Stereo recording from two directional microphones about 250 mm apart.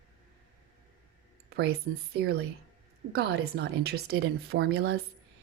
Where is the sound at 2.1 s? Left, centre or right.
Right.